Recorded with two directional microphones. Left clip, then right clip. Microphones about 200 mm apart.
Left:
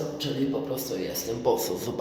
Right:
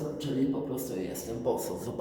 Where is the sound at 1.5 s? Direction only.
15° left (ahead or behind).